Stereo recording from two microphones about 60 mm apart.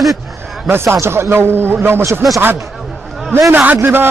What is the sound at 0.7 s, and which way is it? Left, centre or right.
A man's voice, right.